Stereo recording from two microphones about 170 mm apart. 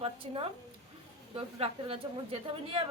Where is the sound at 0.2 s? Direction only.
35° right (ahead or behind).